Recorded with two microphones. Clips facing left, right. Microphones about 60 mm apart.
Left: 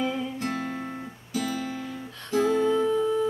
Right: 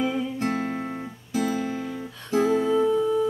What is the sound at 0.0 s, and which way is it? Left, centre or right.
Music, centre.